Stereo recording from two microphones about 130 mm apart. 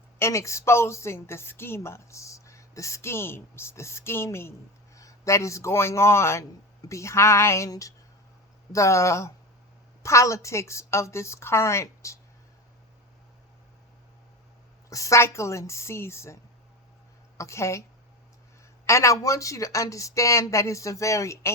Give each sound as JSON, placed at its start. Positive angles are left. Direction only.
{"t": 0.2, "sound": "a woman's voice", "side_deg": 20}
{"t": 14.8, "sound": "a woman's voice", "side_deg": 25}
{"t": 18.9, "sound": "a woman's voice", "side_deg": 25}